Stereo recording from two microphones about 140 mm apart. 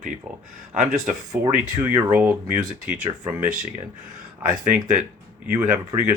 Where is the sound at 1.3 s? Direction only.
20° right (ahead or behind).